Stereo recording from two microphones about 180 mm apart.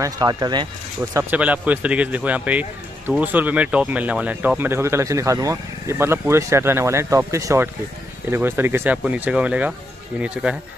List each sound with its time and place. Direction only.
0.0 s speech: 20° right (ahead or behind)
1.3 s speech: 10° right (ahead or behind)